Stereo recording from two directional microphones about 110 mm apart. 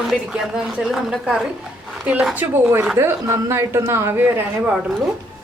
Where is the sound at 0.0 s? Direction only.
5° right (ahead or behind).